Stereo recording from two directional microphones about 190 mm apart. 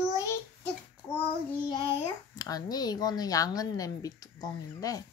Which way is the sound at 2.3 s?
20° left (ahead or behind).